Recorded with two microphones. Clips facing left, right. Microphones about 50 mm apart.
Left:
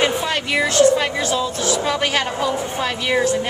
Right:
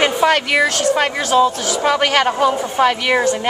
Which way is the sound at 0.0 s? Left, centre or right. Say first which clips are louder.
Right 5 dB; right.